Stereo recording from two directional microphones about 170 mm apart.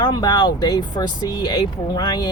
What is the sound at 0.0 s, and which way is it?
Speech, 25° left (ahead or behind).